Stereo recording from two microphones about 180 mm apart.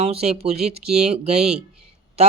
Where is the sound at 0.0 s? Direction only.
35° right (ahead or behind).